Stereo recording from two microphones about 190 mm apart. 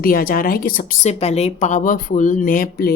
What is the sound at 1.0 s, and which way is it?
Speech, 35° left (ahead or behind).